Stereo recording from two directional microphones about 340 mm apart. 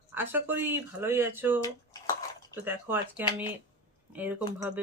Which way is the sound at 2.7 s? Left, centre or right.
Centre.